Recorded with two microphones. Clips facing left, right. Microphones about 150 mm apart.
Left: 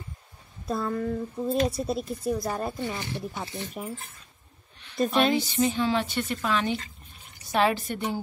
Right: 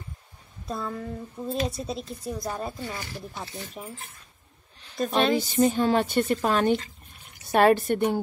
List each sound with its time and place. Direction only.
0.7 s a woman's voice: centre (ahead or behind)
2.8 s speech: 20° left (ahead or behind)
3.3 s a woman's voice: 5° left (ahead or behind)
4.9 s speech: centre (ahead or behind)
5.3 s a woman's voice: 45° right (ahead or behind)